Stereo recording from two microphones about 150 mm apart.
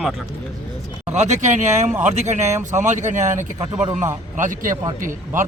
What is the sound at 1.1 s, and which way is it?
Speech, 50° right (ahead or behind).